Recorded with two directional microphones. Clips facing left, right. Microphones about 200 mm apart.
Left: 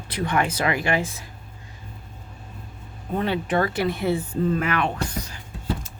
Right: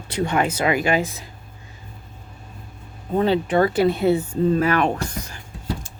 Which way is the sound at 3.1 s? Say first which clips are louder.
Right 5 dB; 30° right (ahead or behind).